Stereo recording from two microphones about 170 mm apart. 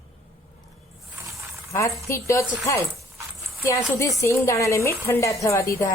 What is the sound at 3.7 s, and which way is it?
A woman's voice, 15° left (ahead or behind).